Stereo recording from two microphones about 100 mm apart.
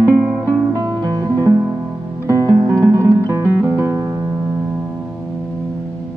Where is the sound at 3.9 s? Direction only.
30° right (ahead or behind).